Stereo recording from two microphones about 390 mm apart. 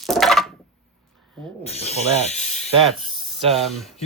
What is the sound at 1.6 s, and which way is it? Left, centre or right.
Snake, centre.